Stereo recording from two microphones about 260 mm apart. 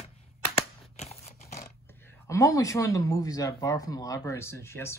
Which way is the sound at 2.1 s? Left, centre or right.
Centre.